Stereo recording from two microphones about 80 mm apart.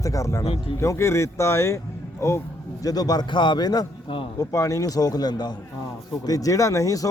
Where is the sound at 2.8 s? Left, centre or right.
Left.